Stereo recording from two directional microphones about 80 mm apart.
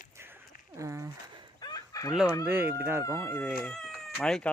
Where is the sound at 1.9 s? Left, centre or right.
Left.